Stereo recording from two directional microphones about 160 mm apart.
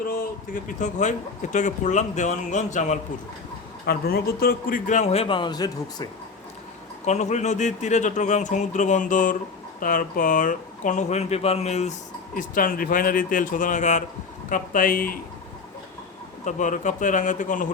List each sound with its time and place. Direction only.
0.1 s a man's voice: 60° left (ahead or behind)
3.8 s a man's voice: 75° left (ahead or behind); by 6.1 s 25° left (ahead or behind)
7.0 s a man's voice: 45° left (ahead or behind)
12.3 s speech: 60° left (ahead or behind)
16.4 s a man's voice: 50° left (ahead or behind)